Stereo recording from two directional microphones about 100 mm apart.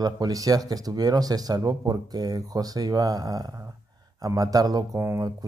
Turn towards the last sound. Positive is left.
turn(degrees=-25)  # may be behind; listen again after turning